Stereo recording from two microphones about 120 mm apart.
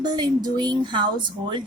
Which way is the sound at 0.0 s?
35° right (ahead or behind).